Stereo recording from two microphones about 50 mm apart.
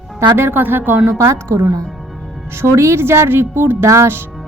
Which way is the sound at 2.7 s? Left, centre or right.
Right.